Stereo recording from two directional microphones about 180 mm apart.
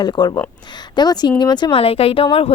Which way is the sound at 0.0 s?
25° left (ahead or behind).